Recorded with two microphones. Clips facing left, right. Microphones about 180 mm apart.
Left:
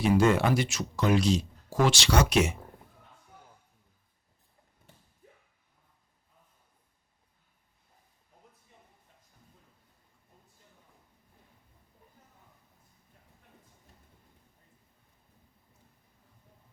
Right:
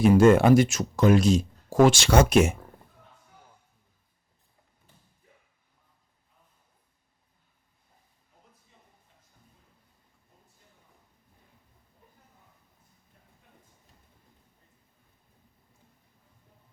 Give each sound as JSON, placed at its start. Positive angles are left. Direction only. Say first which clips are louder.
{"t": 0.0, "sound": "speech", "louder": "right 6 dB", "side_deg": -50}